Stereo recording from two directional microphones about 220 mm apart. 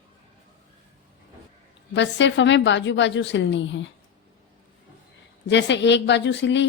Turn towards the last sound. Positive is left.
turn(degrees=55)  # may be behind; listen again after turning